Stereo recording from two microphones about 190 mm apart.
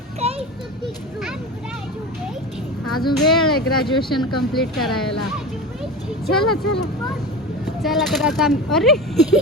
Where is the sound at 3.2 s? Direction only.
Centre (ahead or behind).